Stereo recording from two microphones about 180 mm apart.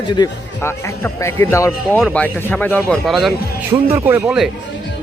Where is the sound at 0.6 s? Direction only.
15° left (ahead or behind).